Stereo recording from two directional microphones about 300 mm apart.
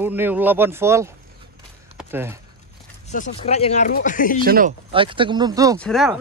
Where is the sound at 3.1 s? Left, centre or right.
Left.